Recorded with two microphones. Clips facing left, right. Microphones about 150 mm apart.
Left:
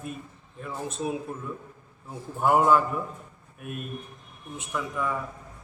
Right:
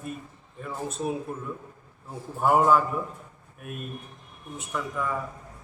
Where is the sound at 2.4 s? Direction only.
5° left (ahead or behind).